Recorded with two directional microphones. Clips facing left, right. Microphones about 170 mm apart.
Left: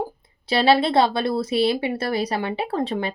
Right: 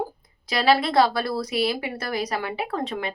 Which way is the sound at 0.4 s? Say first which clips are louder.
Left 3 dB; 30° left (ahead or behind).